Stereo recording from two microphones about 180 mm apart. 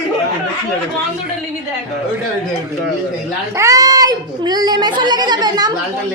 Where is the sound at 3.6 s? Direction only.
20° right (ahead or behind).